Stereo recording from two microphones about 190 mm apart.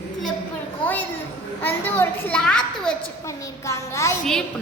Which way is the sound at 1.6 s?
10° left (ahead or behind).